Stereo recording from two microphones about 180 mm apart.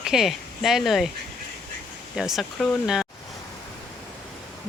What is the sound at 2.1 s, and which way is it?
Speech, centre (ahead or behind).